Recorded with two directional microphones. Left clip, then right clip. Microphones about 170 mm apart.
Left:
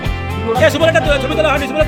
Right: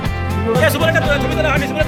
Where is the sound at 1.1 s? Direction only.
45° left (ahead or behind).